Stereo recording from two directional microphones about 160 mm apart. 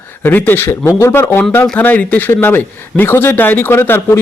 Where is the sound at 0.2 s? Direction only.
10° left (ahead or behind).